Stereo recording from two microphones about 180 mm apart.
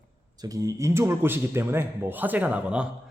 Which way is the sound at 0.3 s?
20° right (ahead or behind).